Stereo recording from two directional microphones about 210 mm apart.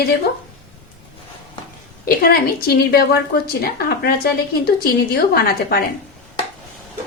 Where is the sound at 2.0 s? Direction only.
45° left (ahead or behind).